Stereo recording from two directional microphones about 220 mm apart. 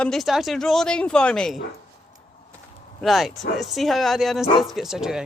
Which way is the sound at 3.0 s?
Centre (ahead or behind).